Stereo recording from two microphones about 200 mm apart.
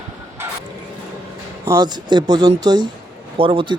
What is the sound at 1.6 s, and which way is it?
Speech, 15° right (ahead or behind).